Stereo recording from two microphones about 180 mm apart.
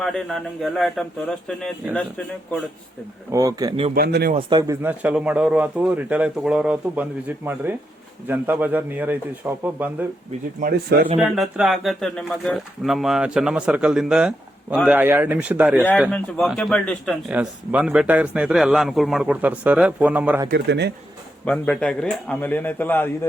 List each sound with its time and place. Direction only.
0.0 s a man's voice: centre (ahead or behind)
3.3 s speech: 20° right (ahead or behind)
3.9 s speech: 60° right (ahead or behind)
4.4 s speech: 25° right (ahead or behind); by 10.1 s 10° right (ahead or behind)
10.6 s speech: 60° right (ahead or behind)
11.3 s speech: centre (ahead or behind)
17.3 s speech: 10° right (ahead or behind)
20.5 s speech: 65° right (ahead or behind)
21.4 s a man's voice: 5° left (ahead or behind)